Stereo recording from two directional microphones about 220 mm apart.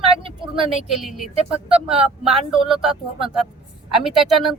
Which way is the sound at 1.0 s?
Centre (ahead or behind).